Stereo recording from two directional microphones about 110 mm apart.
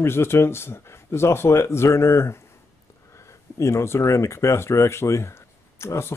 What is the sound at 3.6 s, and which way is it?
Speech, 25° left (ahead or behind).